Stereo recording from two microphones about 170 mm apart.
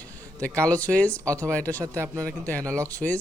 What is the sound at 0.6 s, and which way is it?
Speech, 10° left (ahead or behind).